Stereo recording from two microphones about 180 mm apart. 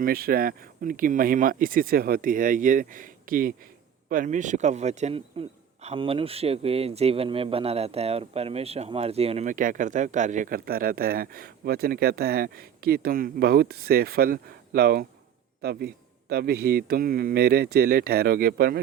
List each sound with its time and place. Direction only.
0.0 s a man's voice: 55° right (ahead or behind)